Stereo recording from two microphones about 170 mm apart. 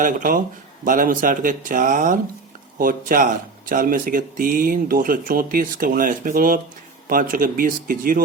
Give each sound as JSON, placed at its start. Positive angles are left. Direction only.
{"t": 0.0, "sound": "speech", "side_deg": -55}